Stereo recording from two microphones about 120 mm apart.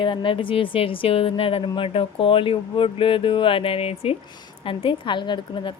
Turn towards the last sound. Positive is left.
turn(degrees=45)  # may be behind; listen again after turning